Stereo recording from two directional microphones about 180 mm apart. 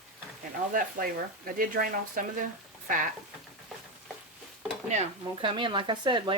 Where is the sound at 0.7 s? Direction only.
50° right (ahead or behind).